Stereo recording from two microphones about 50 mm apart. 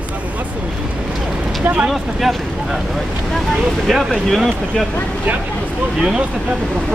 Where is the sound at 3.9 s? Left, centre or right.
Centre.